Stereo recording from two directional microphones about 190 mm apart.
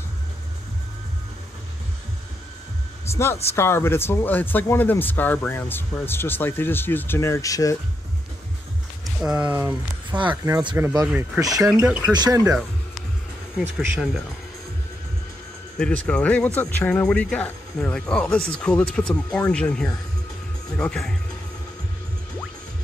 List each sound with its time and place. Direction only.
3.1 s speech: 15° left (ahead or behind)
9.0 s speech: 5° right (ahead or behind); by 10.8 s 20° right (ahead or behind)
10.8 s speech: 10° right (ahead or behind)
13.7 s speech: centre (ahead or behind)
15.8 s speech: 5° left (ahead or behind)